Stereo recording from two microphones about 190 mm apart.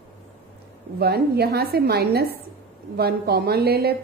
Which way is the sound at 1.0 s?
55° right (ahead or behind).